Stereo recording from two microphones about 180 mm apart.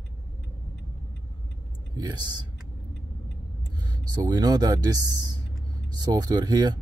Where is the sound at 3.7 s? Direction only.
25° right (ahead or behind).